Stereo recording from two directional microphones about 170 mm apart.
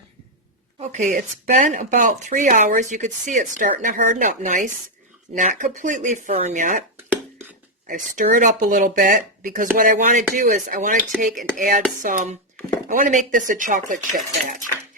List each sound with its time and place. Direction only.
0.8 s speech: 45° right (ahead or behind)
7.9 s speech: 50° right (ahead or behind)